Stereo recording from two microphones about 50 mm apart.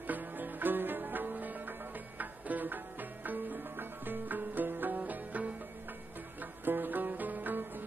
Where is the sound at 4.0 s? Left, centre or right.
Right.